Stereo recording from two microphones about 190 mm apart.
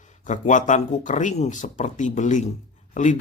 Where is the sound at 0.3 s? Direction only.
40° left (ahead or behind).